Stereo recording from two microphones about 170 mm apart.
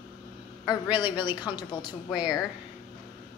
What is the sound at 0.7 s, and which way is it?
A woman's voice, 25° left (ahead or behind).